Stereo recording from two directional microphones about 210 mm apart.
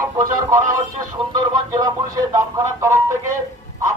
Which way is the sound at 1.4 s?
15° right (ahead or behind).